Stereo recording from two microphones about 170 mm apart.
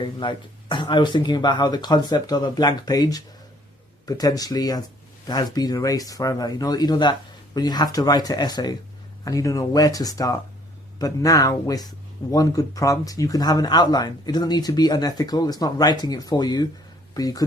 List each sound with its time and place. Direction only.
0.0 s speech: 30° left (ahead or behind)